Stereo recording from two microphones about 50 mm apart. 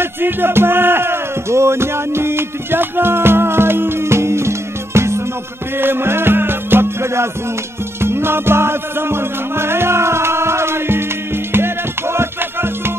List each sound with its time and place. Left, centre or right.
0.0 s music: right
5.8 s music: right